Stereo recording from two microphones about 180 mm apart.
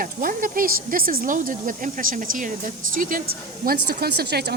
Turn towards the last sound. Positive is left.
turn(degrees=-65)  # may be behind; listen again after turning